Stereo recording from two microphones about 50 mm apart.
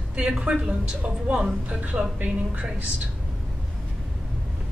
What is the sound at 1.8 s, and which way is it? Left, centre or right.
Speech, right.